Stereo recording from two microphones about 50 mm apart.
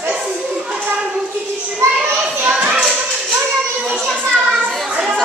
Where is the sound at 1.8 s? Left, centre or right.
Right.